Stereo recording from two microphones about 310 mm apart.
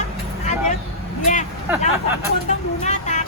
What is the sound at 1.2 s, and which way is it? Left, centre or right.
Vehicle, left.